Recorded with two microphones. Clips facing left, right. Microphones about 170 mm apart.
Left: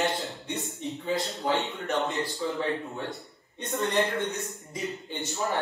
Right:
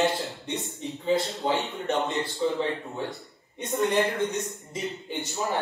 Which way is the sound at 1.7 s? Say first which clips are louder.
Right 2 dB; 35° right (ahead or behind).